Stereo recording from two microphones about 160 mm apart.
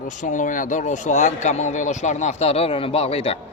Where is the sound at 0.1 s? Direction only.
50° left (ahead or behind).